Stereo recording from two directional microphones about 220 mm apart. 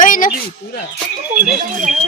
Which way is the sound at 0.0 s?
35° left (ahead or behind).